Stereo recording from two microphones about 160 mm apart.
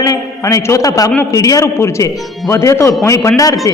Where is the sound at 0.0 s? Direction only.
20° left (ahead or behind).